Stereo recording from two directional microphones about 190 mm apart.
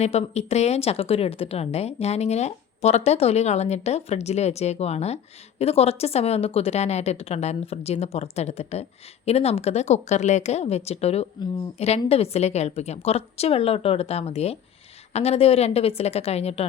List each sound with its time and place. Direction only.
0.0 s speech: 35° left (ahead or behind)